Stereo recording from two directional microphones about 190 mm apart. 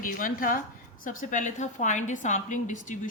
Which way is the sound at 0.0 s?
45° left (ahead or behind).